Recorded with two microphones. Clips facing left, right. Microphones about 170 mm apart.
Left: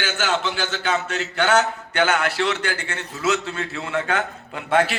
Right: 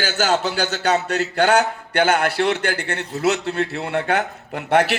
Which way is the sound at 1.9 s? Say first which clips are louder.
Right 3 dB; 50° right (ahead or behind).